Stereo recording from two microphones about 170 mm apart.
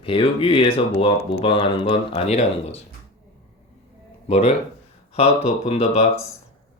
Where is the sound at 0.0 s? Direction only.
35° left (ahead or behind).